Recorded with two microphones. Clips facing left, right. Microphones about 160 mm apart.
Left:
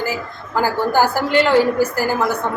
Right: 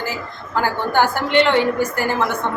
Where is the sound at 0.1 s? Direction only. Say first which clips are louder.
Left 2 dB; 5° left (ahead or behind).